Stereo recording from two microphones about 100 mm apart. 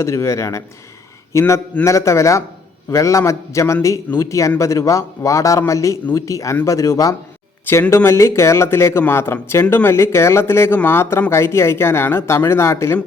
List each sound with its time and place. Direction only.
0.0 s speech: 30° left (ahead or behind)